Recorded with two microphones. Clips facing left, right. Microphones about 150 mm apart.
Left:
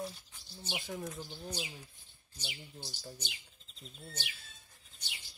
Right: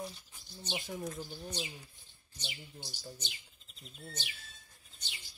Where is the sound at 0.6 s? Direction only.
10° left (ahead or behind).